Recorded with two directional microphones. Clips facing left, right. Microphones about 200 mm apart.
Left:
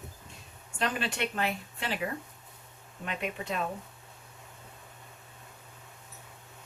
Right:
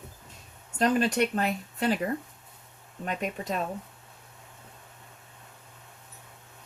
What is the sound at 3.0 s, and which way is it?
Speech, 45° right (ahead or behind).